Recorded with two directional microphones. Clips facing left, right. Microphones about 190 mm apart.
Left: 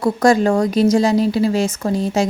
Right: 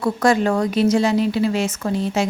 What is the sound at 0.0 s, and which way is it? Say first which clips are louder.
A woman's voice: left 3 dB; 40° left (ahead or behind).